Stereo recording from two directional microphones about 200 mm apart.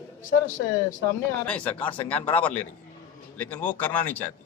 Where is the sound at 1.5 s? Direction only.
5° left (ahead or behind).